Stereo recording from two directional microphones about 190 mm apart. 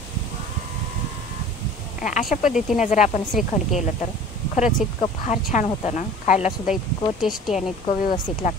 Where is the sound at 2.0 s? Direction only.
45° left (ahead or behind).